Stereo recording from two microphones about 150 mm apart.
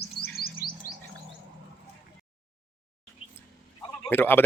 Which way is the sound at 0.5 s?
30° left (ahead or behind).